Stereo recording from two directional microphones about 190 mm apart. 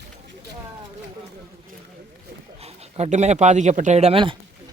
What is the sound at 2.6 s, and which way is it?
Speech, 35° right (ahead or behind).